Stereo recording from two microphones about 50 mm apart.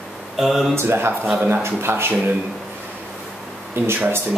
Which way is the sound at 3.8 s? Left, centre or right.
Right.